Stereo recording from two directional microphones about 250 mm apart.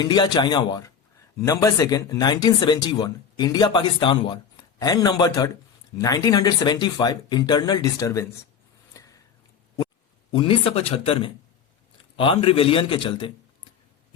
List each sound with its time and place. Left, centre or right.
0.0 s speech: centre
10.3 s a man's voice: left